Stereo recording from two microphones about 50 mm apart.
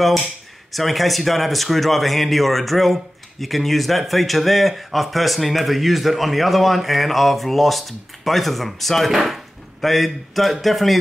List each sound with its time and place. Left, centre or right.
0.7 s speech: centre